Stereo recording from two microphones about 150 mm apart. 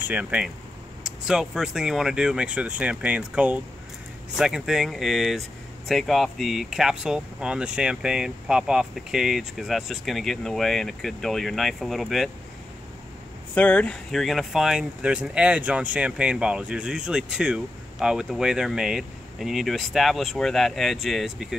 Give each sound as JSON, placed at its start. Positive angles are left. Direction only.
{"t": 0.1, "sound": "speech", "side_deg": -10}
{"t": 13.6, "sound": "speech", "side_deg": 10}